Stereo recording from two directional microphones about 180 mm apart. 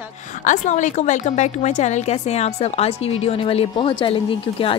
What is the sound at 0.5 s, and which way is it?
A woman's voice, 40° left (ahead or behind).